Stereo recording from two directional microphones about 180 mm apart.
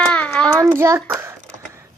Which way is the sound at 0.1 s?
5° left (ahead or behind).